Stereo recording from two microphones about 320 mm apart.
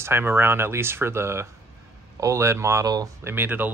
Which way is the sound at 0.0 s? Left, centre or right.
Centre.